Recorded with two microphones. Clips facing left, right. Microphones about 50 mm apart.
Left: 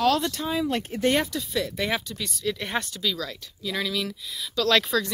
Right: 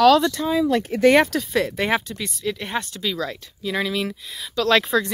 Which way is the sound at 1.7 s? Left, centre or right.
Right.